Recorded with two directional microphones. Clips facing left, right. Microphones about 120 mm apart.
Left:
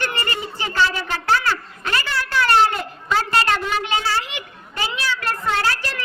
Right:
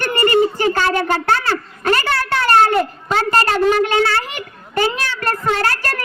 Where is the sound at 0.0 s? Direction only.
45° right (ahead or behind).